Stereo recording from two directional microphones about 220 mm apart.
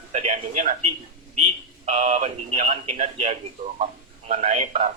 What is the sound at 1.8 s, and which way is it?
A man's voice, 35° right (ahead or behind).